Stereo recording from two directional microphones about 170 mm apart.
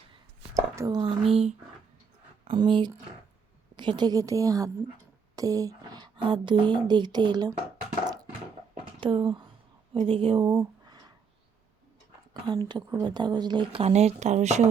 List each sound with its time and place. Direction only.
0.8 s speech: 25° right (ahead or behind)
1.3 s speech: 35° right (ahead or behind)
9.0 s speech: 30° right (ahead or behind)
12.6 s speech: 25° right (ahead or behind); by 14.7 s 40° right (ahead or behind)